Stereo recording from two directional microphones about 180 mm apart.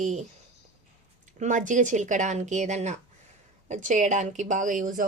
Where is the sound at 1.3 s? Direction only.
45° right (ahead or behind).